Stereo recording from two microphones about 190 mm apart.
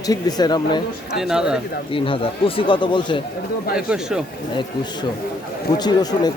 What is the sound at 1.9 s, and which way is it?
Speech, 30° left (ahead or behind).